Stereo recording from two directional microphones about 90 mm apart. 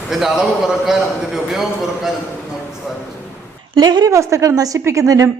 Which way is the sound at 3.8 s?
50° right (ahead or behind).